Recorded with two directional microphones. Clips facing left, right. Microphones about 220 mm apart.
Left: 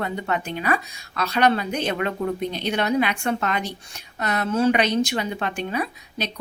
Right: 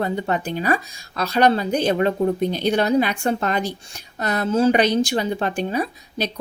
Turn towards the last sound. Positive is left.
turn(degrees=-35)  # may be behind; listen again after turning